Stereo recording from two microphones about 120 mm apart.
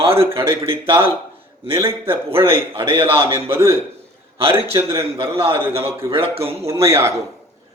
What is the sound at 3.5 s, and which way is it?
A man's voice, 20° right (ahead or behind).